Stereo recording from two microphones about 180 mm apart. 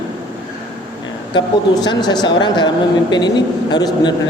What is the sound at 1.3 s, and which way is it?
A woman's voice, 25° left (ahead or behind).